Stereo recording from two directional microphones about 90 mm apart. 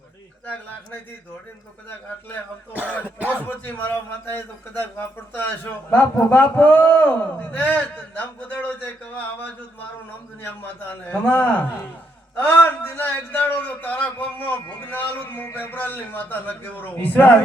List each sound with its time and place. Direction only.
3.2 s a man's voice: 15° right (ahead or behind)
3.4 s a man's voice: 20° left (ahead or behind)
11.0 s a man's voice: 15° left (ahead or behind)